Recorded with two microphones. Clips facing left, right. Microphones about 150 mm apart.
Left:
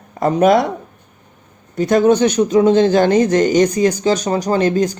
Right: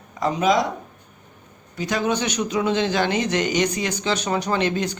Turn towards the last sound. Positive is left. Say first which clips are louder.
# left 7 dB
turn(degrees=40)  # may be behind; listen again after turning